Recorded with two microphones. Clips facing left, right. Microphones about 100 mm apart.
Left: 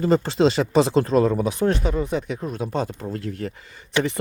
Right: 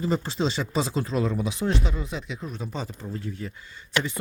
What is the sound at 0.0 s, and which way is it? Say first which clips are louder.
Speech: left 8 dB; 80° left.